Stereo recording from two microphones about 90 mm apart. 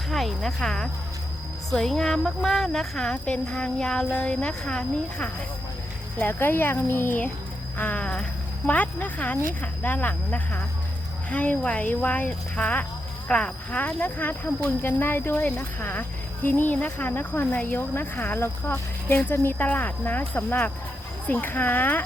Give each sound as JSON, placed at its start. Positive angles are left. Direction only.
{"t": 0.1, "sound": "speech", "side_deg": 0}
{"t": 6.2, "sound": "speech", "side_deg": 25}